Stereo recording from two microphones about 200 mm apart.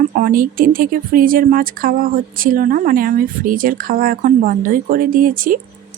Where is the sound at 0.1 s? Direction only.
45° right (ahead or behind).